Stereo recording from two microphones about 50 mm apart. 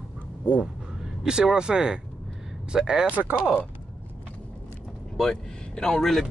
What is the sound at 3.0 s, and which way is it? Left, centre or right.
Speech, right.